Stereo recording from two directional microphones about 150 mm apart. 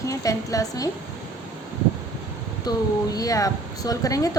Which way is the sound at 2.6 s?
25° left (ahead or behind).